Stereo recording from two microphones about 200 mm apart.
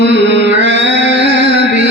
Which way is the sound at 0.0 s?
60° right (ahead or behind).